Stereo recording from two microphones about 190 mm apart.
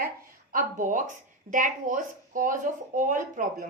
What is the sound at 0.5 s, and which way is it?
A woman's voice, 45° right (ahead or behind).